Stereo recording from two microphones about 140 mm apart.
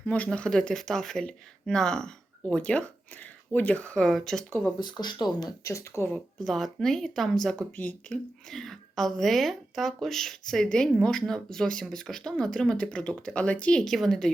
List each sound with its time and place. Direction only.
0.0 s speech: 10° left (ahead or behind)
4.8 s speech: 30° left (ahead or behind)
6.1 s speech: 5° left (ahead or behind)